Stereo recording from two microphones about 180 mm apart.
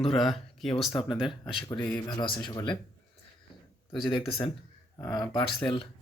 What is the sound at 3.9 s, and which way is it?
Speech, 25° left (ahead or behind).